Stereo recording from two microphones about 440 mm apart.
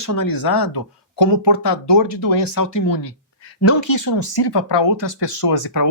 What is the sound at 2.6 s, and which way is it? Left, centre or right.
Speech, left.